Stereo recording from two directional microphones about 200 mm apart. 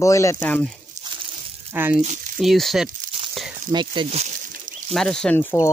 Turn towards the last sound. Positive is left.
turn(degrees=10)  # may be behind; listen again after turning